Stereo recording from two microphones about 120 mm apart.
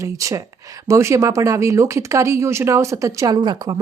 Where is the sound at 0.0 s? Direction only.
25° right (ahead or behind).